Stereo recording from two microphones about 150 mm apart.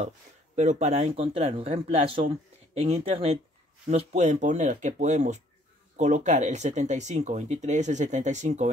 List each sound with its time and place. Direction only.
0.6 s speech: 50° right (ahead or behind)